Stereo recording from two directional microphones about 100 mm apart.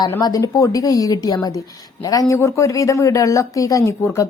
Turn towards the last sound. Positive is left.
turn(degrees=25)  # may be behind; listen again after turning